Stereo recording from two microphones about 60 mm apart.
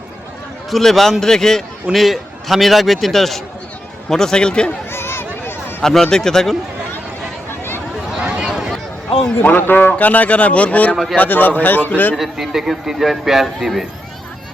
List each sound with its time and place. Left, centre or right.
0.7 s speech: centre
4.9 s a sound: left
5.8 s speech: centre
8.1 s a sound: centre
9.4 s a man's voice: left
10.9 s speech: centre
11.2 s speech: left
12.1 s speech: centre